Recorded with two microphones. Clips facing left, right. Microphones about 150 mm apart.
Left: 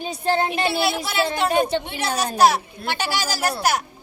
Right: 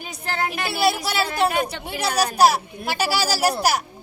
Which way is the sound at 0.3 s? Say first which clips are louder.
Left 5 dB; 25° left (ahead or behind).